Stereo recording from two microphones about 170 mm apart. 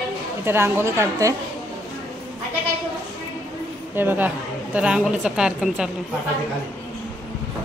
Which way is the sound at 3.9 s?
10° right (ahead or behind).